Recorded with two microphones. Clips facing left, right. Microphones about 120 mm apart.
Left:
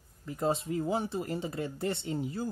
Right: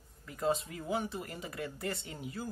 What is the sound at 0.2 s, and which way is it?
Speech, 25° left (ahead or behind).